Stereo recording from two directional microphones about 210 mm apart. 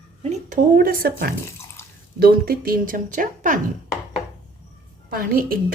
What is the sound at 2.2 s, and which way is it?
A woman's voice, 45° right (ahead or behind).